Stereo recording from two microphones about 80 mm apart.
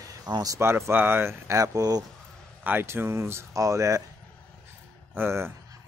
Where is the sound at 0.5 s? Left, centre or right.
Right.